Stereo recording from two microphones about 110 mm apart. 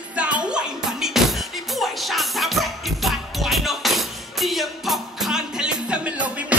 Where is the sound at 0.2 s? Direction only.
10° right (ahead or behind).